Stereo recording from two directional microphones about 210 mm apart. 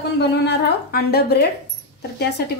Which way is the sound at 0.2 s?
55° left (ahead or behind).